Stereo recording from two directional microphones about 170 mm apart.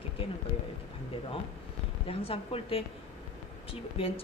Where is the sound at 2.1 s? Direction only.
35° left (ahead or behind).